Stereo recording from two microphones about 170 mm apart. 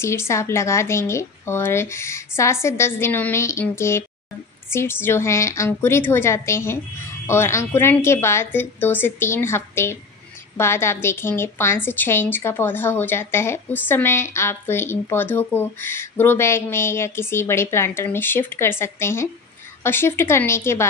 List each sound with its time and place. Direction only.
0.0 s a woman's voice: 15° left (ahead or behind)